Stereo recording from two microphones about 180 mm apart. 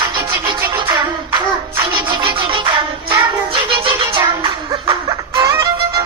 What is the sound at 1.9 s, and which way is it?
Music, 25° right (ahead or behind).